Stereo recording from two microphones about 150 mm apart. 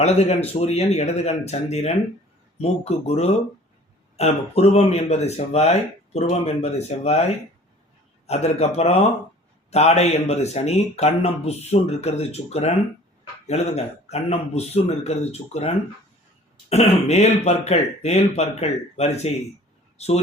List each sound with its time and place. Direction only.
0.0 s a man's voice: 45° left (ahead or behind)
8.3 s a man's voice: 45° left (ahead or behind)